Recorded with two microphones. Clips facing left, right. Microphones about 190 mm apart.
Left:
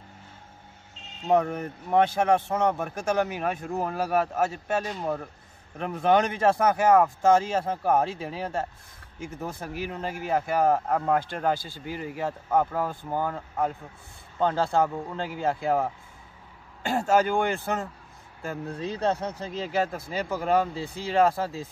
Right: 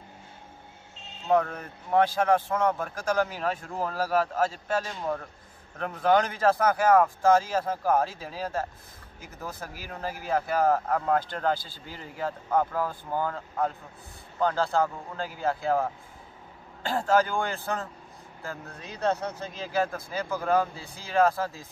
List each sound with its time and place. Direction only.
1.2 s speech: 20° left (ahead or behind)
16.8 s speech: 20° left (ahead or behind)
19.6 s speech: 25° left (ahead or behind)